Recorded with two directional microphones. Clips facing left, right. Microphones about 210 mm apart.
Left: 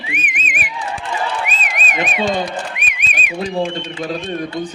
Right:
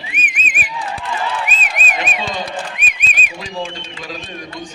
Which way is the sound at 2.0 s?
50° left (ahead or behind).